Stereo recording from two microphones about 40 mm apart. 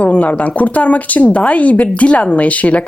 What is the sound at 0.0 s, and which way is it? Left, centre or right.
Speech, left.